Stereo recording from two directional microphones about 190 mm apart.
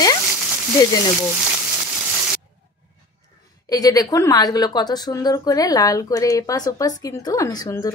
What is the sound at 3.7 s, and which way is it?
A woman's voice, 20° left (ahead or behind).